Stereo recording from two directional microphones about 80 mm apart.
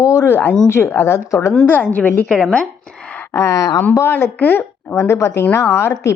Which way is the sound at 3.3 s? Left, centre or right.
Left.